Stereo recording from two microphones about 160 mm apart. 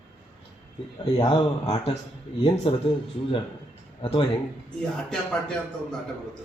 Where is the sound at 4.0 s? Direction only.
35° left (ahead or behind).